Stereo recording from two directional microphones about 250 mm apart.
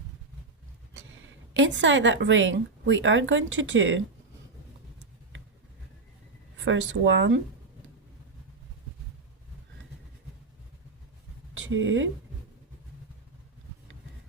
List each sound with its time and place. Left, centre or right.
1.5 s a woman's voice: right
6.7 s a woman's voice: right
11.6 s speech: right